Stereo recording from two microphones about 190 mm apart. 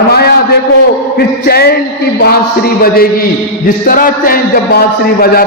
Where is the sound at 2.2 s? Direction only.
55° left (ahead or behind).